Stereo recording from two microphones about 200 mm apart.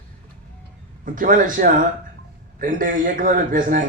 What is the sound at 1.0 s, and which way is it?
A man's voice, 45° right (ahead or behind).